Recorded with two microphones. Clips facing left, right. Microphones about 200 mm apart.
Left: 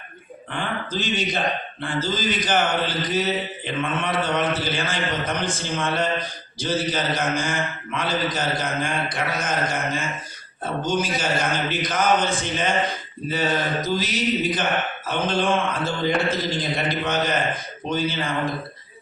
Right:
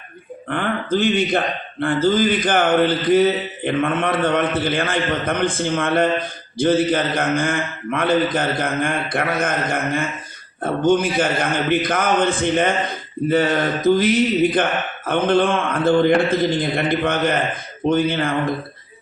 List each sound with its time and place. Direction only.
0.4 s a man's voice: 55° right (ahead or behind)